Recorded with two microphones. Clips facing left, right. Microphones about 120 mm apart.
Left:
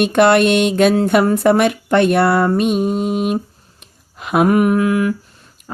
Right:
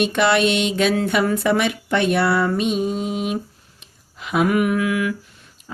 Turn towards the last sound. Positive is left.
turn(degrees=45)  # may be behind; listen again after turning